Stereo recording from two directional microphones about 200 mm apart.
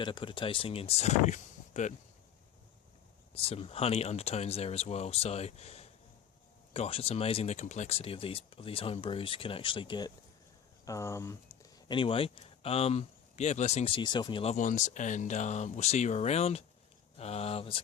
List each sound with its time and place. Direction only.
0.0 s speech: 25° left (ahead or behind)
3.3 s speech: 30° left (ahead or behind)
14.5 s speech: 40° left (ahead or behind)